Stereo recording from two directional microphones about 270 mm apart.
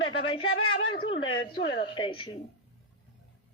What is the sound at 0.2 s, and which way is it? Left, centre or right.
Speech, centre.